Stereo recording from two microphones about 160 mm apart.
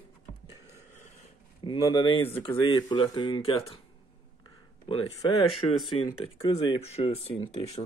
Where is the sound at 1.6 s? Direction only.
25° left (ahead or behind).